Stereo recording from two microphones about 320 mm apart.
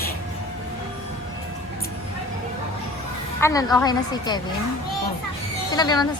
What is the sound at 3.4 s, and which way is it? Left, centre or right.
A woman's voice, centre.